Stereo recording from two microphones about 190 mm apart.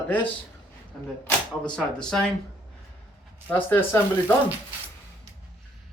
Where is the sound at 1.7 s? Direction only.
5° left (ahead or behind).